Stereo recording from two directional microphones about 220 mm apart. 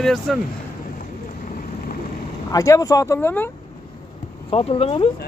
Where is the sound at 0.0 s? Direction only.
Centre (ahead or behind).